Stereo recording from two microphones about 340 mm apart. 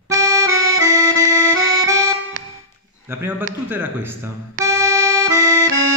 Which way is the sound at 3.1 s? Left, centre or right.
Centre.